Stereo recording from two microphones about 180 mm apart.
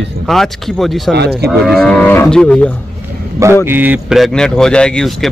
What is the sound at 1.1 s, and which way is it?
Speech, 65° right (ahead or behind).